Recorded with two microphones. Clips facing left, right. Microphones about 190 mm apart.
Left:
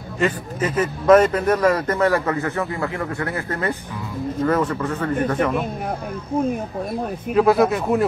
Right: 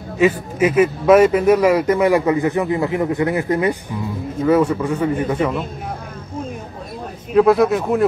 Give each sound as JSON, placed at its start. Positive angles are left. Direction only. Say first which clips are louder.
{"t": 0.2, "sound": "a man's voice", "louder": "right 6 dB", "side_deg": -10}
{"t": 7.3, "sound": "speech", "louder": "right 3 dB", "side_deg": 0}